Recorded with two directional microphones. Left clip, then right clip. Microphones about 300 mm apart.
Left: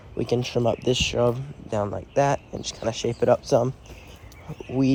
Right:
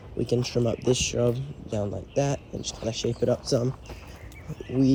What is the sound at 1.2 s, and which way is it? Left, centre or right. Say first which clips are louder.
Speech: left 5 dB; left.